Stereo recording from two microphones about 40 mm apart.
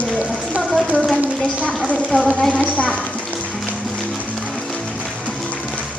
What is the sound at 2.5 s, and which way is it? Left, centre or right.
Speech, left.